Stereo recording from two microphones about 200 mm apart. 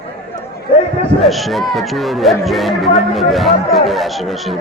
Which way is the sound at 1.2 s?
Centre (ahead or behind).